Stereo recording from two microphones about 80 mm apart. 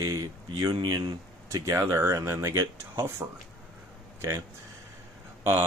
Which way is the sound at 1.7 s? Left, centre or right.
Right.